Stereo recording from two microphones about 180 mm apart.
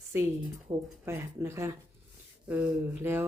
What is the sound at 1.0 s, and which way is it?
Speech, 15° right (ahead or behind).